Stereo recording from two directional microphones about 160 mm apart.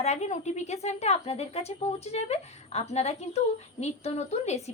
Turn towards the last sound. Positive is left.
turn(degrees=45)  # may be behind; listen again after turning